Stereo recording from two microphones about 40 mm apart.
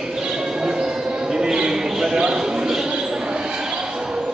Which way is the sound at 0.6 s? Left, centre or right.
Centre.